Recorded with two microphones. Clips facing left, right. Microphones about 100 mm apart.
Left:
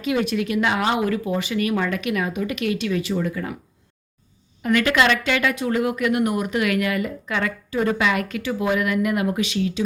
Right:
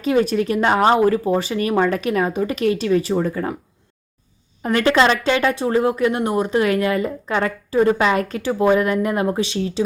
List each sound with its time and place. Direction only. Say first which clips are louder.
0.0 s a woman's voice: right 5 dB; 35° right (ahead or behind)
4.6 s a woman's voice: right 3 dB; 35° right (ahead or behind)